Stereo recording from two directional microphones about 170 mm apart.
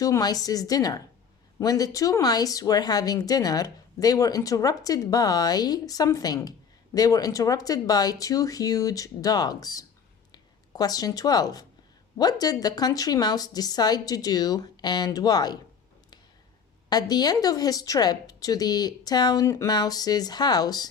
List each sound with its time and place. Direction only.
0.0 s speech: 20° left (ahead or behind)
16.9 s speech: 25° left (ahead or behind)